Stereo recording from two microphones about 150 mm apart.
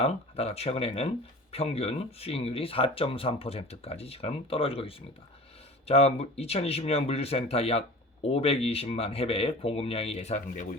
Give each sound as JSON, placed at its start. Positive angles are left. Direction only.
{"t": 0.0, "sound": "speech", "side_deg": 40}